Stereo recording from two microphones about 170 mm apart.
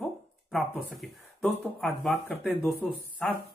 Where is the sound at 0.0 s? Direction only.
Centre (ahead or behind).